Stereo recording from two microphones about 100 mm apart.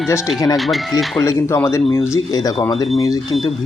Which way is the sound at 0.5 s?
Centre (ahead or behind).